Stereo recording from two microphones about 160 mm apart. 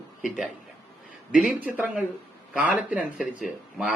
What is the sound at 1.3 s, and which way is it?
A man's voice, 10° right (ahead or behind).